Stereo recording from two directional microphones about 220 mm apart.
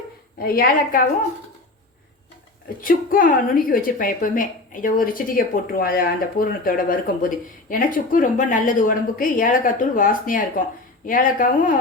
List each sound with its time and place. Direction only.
0.3 s a woman's voice: 40° left (ahead or behind)
2.8 s a woman's voice: 40° left (ahead or behind)